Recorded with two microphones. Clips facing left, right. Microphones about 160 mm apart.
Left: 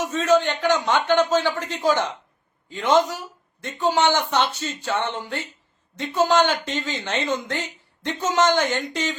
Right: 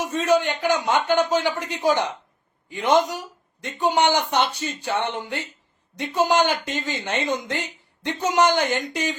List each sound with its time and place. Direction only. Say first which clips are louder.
0.0 s speech: left 1 dB; 10° right (ahead or behind)